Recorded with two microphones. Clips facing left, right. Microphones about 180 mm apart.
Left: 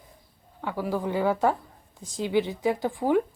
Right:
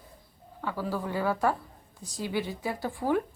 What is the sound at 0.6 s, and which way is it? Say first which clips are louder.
A woman's voice: left 3 dB; 15° left (ahead or behind).